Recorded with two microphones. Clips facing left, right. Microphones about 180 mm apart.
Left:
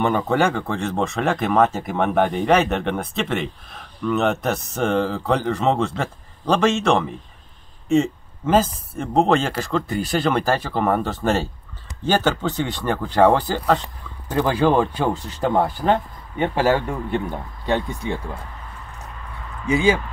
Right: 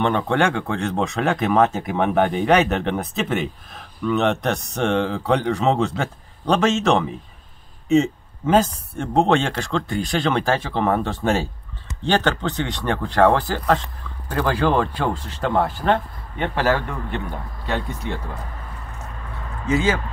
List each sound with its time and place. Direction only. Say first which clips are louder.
0.0 s speech: even; 5° left (ahead or behind)
14.3 s speech: left 2 dB; 15° left (ahead or behind)
19.7 s speech: left 2 dB; 15° left (ahead or behind)